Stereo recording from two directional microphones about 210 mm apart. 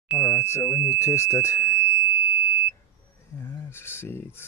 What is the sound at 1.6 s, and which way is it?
Alarm, 25° left (ahead or behind).